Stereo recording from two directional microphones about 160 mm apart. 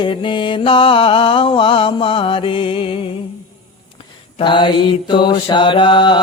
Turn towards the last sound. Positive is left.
turn(degrees=30)  # may be behind; listen again after turning